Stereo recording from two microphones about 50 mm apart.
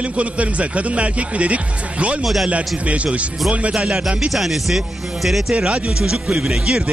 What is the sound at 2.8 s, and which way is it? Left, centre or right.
Speech, right.